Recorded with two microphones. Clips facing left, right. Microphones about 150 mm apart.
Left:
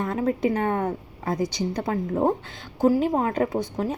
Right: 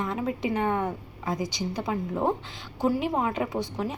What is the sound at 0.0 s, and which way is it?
Speech, 45° left (ahead or behind).